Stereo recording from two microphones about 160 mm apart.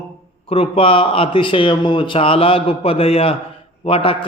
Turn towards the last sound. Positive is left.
turn(degrees=35)  # may be behind; listen again after turning